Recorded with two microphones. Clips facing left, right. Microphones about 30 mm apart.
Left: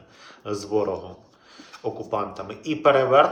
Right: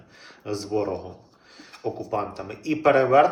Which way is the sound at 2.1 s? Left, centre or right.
Centre.